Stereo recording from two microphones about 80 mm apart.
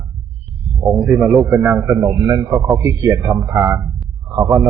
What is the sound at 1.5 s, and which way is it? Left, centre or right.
Speech, right.